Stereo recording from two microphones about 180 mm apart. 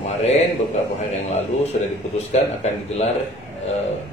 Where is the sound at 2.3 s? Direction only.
35° left (ahead or behind).